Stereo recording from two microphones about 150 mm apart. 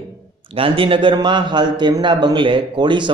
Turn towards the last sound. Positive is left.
turn(degrees=-30)  # may be behind; listen again after turning